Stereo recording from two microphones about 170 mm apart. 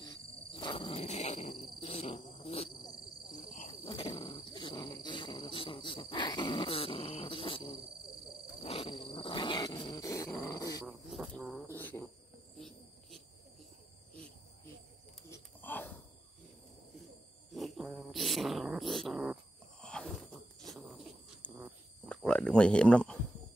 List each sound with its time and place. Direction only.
0.0 s wild animals: 25° left (ahead or behind)
4.1 s insect: 25° left (ahead or behind)
8.6 s grunt: 30° left (ahead or behind)
10.9 s insect: centre (ahead or behind)
12.5 s cricket: centre (ahead or behind)
15.2 s a sound: 15° left (ahead or behind)
17.5 s cat: centre (ahead or behind)
19.8 s a sound: 5° left (ahead or behind)
21.5 s cricket: centre (ahead or behind)